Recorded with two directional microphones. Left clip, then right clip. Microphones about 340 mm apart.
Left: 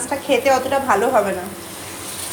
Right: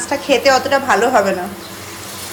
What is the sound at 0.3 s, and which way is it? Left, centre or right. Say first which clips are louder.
Speech: right 4 dB; centre.